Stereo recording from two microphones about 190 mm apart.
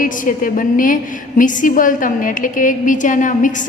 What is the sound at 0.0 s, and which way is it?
A woman's voice, 45° left (ahead or behind).